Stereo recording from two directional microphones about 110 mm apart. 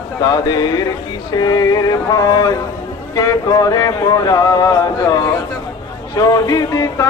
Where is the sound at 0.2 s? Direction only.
35° left (ahead or behind).